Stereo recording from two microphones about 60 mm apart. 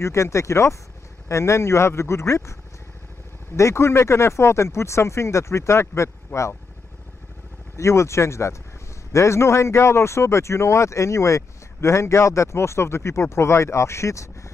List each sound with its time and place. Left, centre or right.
0.0 s speech: left
3.5 s speech: left
7.7 s speech: left